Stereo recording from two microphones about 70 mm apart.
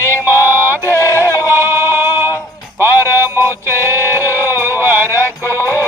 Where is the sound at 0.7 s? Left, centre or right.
Left.